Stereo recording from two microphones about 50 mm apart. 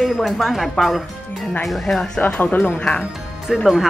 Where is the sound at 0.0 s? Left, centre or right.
Centre.